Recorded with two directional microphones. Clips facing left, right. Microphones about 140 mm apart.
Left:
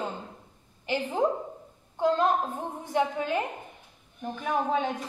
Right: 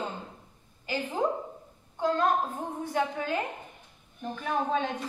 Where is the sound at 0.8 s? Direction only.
20° left (ahead or behind).